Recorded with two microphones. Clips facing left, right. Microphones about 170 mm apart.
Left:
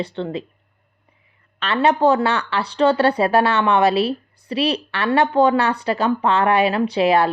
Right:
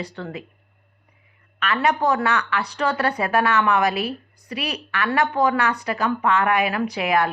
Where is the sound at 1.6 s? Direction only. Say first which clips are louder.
Left 4 dB; 30° left (ahead or behind).